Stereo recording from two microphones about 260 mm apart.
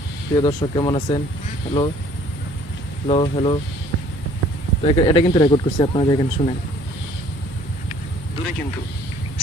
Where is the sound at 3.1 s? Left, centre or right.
Left.